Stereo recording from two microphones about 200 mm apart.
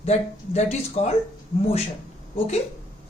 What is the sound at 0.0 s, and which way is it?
Speech, 35° left (ahead or behind).